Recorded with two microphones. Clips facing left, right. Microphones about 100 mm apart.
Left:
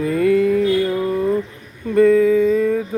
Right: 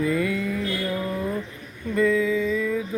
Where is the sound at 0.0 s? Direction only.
50° left (ahead or behind).